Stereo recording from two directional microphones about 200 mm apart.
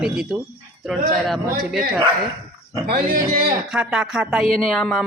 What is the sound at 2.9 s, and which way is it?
Speech, 45° right (ahead or behind).